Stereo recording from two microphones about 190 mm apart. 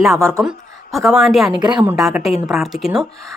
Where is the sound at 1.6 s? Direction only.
25° right (ahead or behind).